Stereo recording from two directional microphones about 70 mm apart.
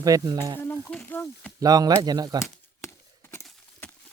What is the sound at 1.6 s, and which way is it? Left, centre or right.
Speech, right.